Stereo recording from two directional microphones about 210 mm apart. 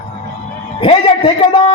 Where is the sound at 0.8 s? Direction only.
25° left (ahead or behind).